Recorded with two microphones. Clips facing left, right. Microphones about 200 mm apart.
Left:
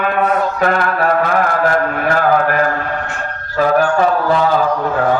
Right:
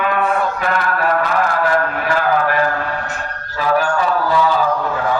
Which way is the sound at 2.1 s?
50° left (ahead or behind).